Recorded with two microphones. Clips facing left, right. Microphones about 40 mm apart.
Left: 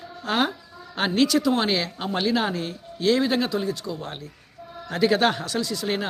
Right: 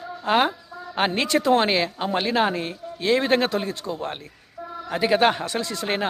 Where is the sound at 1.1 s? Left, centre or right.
Right.